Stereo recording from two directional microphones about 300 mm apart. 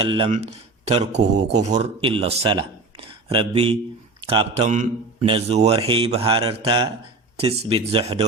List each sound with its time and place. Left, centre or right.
0.0 s a man's voice: centre